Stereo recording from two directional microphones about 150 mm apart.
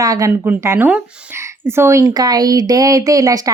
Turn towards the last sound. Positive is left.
turn(degrees=-20)  # may be behind; listen again after turning